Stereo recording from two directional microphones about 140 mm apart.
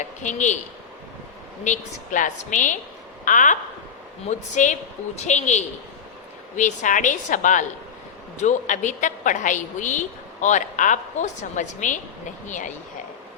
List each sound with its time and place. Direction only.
0.0 s a woman's voice: 60° left (ahead or behind)
1.6 s a woman's voice: 65° left (ahead or behind)